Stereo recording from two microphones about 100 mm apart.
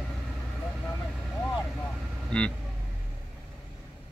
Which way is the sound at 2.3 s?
10° left (ahead or behind).